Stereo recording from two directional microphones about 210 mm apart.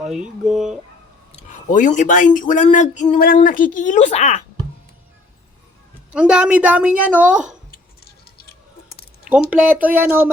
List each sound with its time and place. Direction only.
0.0 s speech: centre (ahead or behind)
1.4 s speech: 35° left (ahead or behind)
6.1 s a woman's voice: 5° right (ahead or behind)
7.7 s keys jangling: 45° left (ahead or behind)
9.2 s a woman's voice: 5° right (ahead or behind)